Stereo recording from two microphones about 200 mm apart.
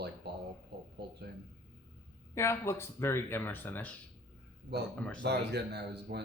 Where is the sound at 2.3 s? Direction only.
15° left (ahead or behind).